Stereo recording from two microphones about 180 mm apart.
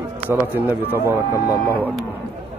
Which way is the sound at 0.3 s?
10° right (ahead or behind).